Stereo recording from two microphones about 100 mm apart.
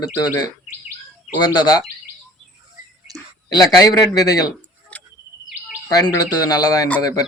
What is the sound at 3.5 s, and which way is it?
Speech, 40° left (ahead or behind).